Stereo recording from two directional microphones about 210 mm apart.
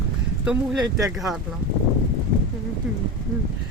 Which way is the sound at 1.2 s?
Centre (ahead or behind).